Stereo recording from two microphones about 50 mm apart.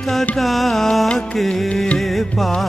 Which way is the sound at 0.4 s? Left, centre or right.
Centre.